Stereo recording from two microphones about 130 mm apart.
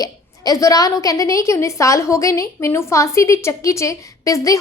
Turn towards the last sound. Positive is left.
turn(degrees=25)  # may be behind; listen again after turning